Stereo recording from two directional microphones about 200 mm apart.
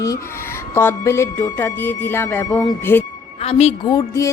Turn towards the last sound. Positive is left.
turn(degrees=15)  # may be behind; listen again after turning